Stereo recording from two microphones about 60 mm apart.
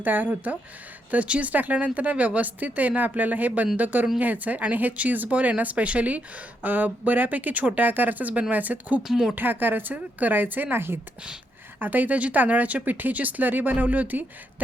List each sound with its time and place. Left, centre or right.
0.0 s speech: right
9.0 s speech: centre
9.3 s speech: right
11.8 s speech: right